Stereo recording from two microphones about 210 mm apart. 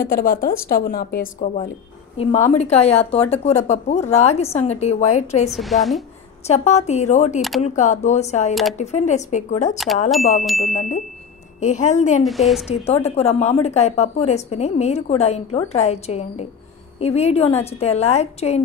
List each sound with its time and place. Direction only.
0.0 s a woman's voice: 45° left (ahead or behind)
5.5 s a woman's voice: centre (ahead or behind)
6.4 s a woman's voice: 30° left (ahead or behind)
10.4 s a woman's voice: centre (ahead or behind)
10.7 s a woman's voice: 35° left (ahead or behind)
12.2 s a woman's voice: centre (ahead or behind)
12.8 s a woman's voice: 30° left (ahead or behind)